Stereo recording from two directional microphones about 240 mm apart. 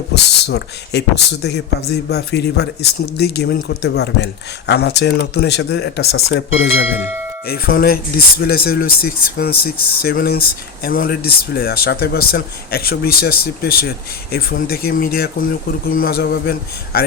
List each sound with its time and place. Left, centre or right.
0.1 s speech: left
7.4 s speech: left